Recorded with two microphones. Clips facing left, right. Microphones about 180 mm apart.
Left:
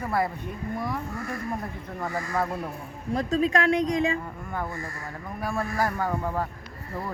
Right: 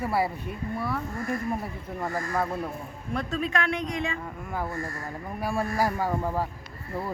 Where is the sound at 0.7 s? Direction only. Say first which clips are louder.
Even; 15° left (ahead or behind).